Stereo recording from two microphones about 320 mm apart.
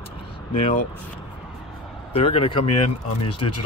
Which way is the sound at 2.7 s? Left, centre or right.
Left.